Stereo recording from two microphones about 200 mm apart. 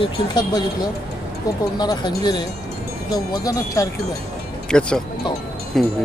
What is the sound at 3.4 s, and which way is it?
Speech, 15° left (ahead or behind).